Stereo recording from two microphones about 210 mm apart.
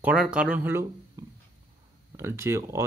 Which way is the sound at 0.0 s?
5° right (ahead or behind).